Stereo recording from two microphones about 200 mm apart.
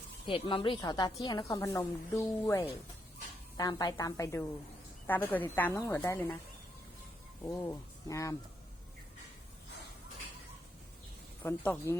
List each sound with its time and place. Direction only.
0.3 s a woman's voice: 25° left (ahead or behind)
7.4 s speech: 15° left (ahead or behind)
11.4 s speech: 10° left (ahead or behind)